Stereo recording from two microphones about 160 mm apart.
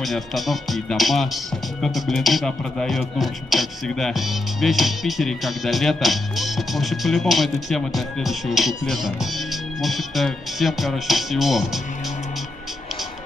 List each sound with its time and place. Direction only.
0.0 s speech: centre (ahead or behind)